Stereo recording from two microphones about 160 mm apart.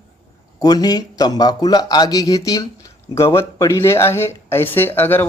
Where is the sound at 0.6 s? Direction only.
25° left (ahead or behind).